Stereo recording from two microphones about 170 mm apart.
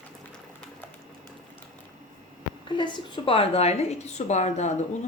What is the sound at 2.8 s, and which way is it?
A woman's voice, 25° left (ahead or behind).